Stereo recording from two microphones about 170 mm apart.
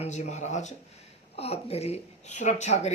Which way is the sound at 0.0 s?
45° left (ahead or behind).